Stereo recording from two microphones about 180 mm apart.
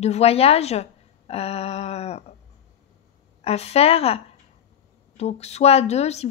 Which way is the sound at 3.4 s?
35° left (ahead or behind).